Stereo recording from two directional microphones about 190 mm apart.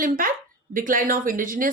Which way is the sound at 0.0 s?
45° right (ahead or behind).